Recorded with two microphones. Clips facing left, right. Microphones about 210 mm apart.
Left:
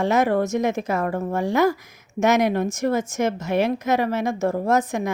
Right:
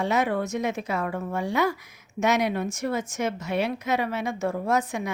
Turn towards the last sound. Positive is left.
turn(degrees=45)  # may be behind; listen again after turning